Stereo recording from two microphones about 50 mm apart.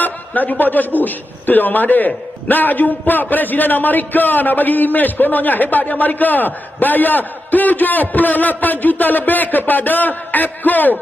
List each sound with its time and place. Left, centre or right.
0.0 s a man's voice: left